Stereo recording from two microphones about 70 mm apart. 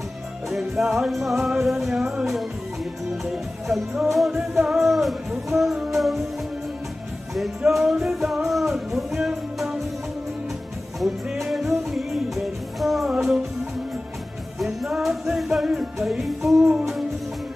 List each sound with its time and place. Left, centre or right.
0.5 s music: centre
7.7 s music: centre
11.0 s music: centre
14.6 s music: centre